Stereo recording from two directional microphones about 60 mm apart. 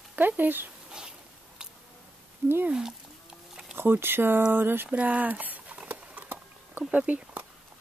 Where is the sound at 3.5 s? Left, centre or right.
Centre.